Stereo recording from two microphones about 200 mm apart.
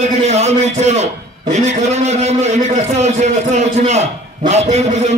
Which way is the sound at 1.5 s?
35° right (ahead or behind).